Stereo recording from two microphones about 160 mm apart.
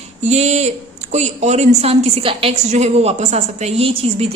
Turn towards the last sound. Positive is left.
turn(degrees=-40)  # may be behind; listen again after turning